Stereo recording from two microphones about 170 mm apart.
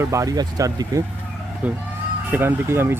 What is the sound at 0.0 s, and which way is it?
Speech, 20° right (ahead or behind).